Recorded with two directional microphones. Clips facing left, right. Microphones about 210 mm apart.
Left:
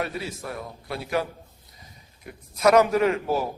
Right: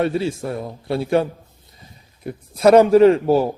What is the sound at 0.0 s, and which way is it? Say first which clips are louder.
A man's voice: right 10 dB; 30° right (ahead or behind).